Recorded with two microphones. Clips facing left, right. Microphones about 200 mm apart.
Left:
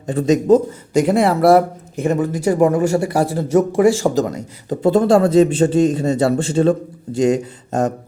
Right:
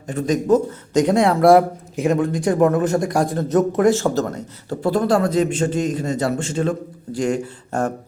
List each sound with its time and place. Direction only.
0.1 s speech: 25° left (ahead or behind)
0.9 s speech: 5° left (ahead or behind)